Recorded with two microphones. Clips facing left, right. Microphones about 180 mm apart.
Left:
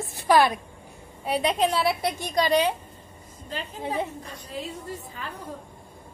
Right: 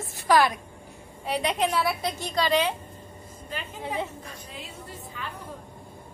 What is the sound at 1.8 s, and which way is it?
Speech, 15° left (ahead or behind).